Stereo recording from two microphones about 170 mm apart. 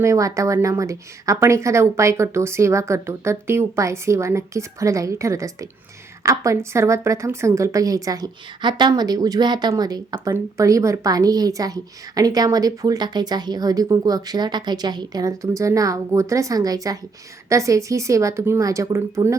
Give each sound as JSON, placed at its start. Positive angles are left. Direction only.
{"t": 0.0, "sound": "a woman's voice", "side_deg": -20}